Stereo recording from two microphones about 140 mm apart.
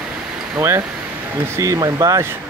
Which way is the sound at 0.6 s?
20° right (ahead or behind).